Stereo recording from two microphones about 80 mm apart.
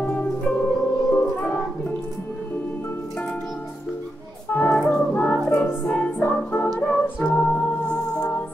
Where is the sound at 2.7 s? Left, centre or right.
Left.